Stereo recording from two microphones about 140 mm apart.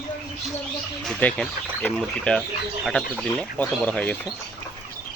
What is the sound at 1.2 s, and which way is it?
Speech, 10° left (ahead or behind).